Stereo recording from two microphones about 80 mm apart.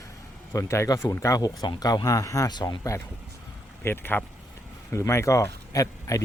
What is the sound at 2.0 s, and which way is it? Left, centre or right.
Speech, left.